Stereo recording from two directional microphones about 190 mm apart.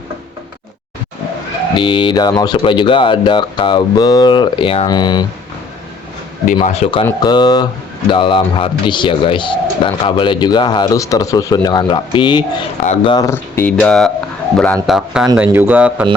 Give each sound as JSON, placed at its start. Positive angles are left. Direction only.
{"t": 1.7, "sound": "speech", "side_deg": 25}
{"t": 6.7, "sound": "speech", "side_deg": 35}
{"t": 13.7, "sound": "speech", "side_deg": 0}